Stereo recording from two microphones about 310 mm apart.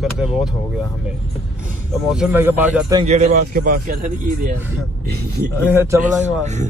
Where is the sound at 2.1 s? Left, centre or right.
Centre.